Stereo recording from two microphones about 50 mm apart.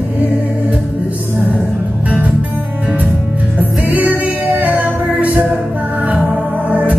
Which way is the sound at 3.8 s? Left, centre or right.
Right.